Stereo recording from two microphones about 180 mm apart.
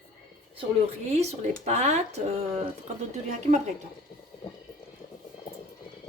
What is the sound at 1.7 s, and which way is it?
Speech, 40° right (ahead or behind).